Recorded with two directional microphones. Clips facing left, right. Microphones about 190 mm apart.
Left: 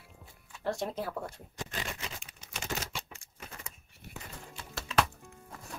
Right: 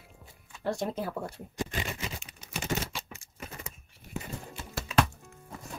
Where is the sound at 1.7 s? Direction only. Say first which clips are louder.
Right 4 dB; 5° right (ahead or behind).